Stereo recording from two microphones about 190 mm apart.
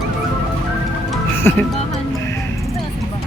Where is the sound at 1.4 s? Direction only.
10° left (ahead or behind).